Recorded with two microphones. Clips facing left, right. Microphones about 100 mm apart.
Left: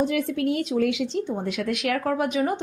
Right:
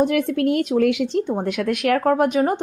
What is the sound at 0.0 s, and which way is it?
A woman's voice, 55° right (ahead or behind).